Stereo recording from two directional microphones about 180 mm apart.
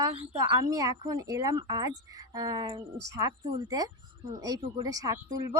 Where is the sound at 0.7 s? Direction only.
20° right (ahead or behind).